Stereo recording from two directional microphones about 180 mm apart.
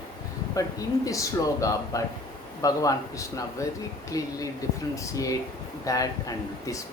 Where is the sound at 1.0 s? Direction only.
15° left (ahead or behind).